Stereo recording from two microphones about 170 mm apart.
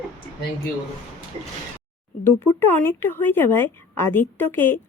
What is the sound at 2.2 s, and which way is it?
A woman's voice, 15° left (ahead or behind).